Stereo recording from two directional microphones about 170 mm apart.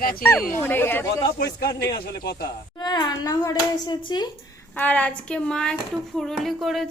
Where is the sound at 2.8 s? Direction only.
25° left (ahead or behind).